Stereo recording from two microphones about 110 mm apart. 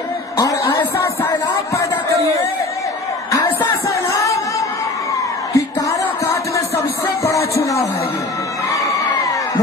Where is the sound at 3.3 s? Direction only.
30° left (ahead or behind).